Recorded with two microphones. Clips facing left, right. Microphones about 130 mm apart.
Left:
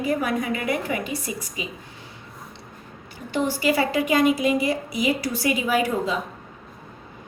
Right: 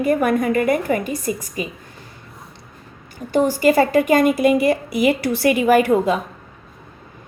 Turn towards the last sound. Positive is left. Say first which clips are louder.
# right 8 dB
turn(degrees=-60)  # may be behind; listen again after turning